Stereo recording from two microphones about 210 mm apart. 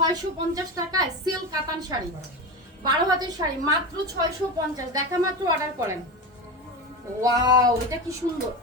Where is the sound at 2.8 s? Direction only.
20° right (ahead or behind).